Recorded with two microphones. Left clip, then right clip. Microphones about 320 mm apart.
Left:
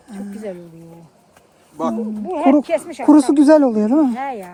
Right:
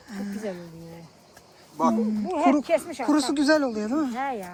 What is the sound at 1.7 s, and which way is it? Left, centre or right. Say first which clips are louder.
Speech: left 1 dB; left.